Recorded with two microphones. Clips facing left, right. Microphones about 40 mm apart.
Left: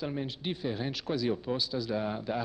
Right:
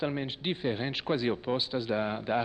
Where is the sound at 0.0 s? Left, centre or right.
Right.